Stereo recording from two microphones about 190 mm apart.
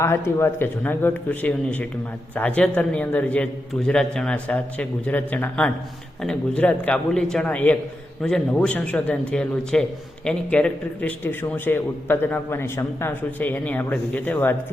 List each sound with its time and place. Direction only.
0.0 s a man's voice: 15° left (ahead or behind)